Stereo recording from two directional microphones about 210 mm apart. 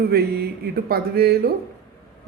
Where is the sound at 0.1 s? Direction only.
45° right (ahead or behind).